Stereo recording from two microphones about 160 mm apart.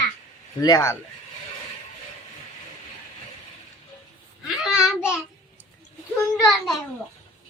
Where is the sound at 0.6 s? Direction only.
25° left (ahead or behind).